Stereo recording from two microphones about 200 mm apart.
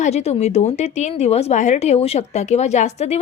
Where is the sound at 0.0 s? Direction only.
30° left (ahead or behind).